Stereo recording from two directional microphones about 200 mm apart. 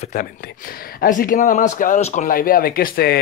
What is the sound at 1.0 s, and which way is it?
Speech, 45° left (ahead or behind).